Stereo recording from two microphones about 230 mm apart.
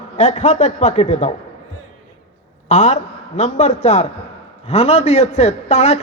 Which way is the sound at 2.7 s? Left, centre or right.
Left.